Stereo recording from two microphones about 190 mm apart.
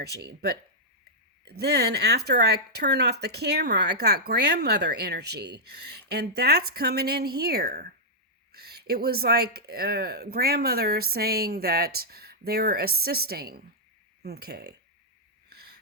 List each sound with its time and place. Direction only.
0.1 s speech: 60° right (ahead or behind)
15.4 s wheeze: 55° right (ahead or behind)